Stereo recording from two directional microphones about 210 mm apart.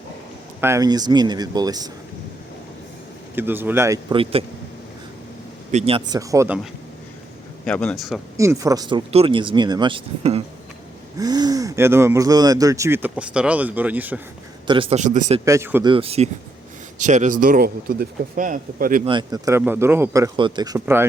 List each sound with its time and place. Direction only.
0.6 s speech: 15° right (ahead or behind)
3.3 s speech: 10° right (ahead or behind); by 4.4 s 25° right (ahead or behind)
5.7 s speech: 25° right (ahead or behind)
6.1 s speech: 15° right (ahead or behind)
7.6 s a man's voice: 5° left (ahead or behind)
8.4 s speech: 15° right (ahead or behind)
14.7 s speech: 25° right (ahead or behind)
15.4 s speech: 10° right (ahead or behind)
15.9 s speech: 25° right (ahead or behind)
19.0 s speech: 20° right (ahead or behind)